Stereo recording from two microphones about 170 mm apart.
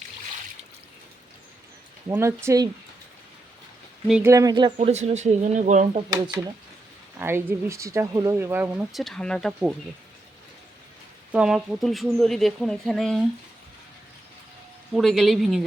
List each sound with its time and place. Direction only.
2.0 s speech: 15° right (ahead or behind)
4.1 s speech: 15° right (ahead or behind)
4.8 s speech: 40° right (ahead or behind)
6.1 s speech: 25° right (ahead or behind)
7.2 s speech: 15° right (ahead or behind)
11.3 s speech: 5° right (ahead or behind)
14.9 s speech: centre (ahead or behind)